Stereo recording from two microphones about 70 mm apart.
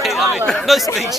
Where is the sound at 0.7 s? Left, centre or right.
Centre.